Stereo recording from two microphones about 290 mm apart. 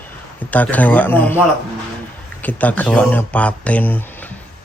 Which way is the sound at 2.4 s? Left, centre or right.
Centre.